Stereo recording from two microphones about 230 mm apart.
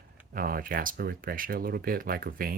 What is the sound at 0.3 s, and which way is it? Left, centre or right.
Speech, right.